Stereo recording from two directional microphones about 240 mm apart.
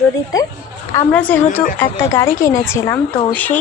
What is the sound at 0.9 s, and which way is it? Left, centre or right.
Speech, centre.